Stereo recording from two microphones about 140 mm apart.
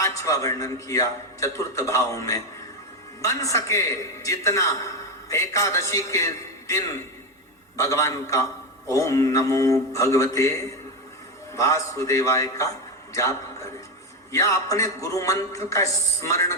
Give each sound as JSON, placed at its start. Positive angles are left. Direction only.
{"t": 0.0, "sound": "a man's voice", "side_deg": 20}